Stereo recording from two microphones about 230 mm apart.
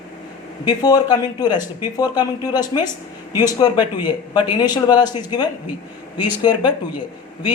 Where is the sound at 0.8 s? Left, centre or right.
Centre.